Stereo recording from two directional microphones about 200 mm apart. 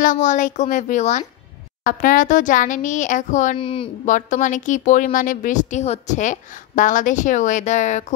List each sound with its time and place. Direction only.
0.0 s speech: 40° left (ahead or behind)
3.5 s a woman's voice: 25° left (ahead or behind)
4.0 s speech: 40° left (ahead or behind)